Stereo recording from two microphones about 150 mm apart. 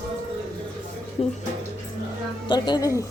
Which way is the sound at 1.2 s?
40° left (ahead or behind).